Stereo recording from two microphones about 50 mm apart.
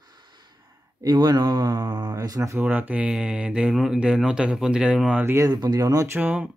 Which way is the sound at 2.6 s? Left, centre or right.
Right.